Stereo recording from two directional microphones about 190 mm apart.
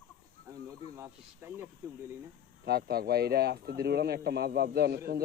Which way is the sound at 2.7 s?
55° right (ahead or behind).